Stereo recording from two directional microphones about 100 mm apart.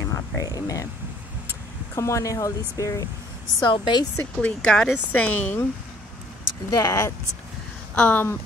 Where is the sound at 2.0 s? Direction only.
30° left (ahead or behind).